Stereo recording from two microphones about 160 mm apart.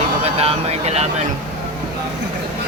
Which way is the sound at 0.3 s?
40° right (ahead or behind).